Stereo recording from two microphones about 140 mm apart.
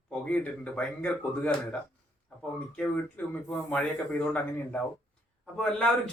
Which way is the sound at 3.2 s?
10° left (ahead or behind).